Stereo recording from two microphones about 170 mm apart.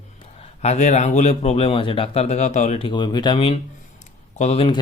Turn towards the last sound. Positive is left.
turn(degrees=35)  # may be behind; listen again after turning